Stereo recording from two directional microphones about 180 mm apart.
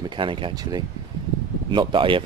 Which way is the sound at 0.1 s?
30° right (ahead or behind).